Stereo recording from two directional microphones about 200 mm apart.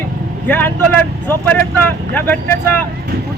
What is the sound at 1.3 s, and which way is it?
Speech, 10° left (ahead or behind).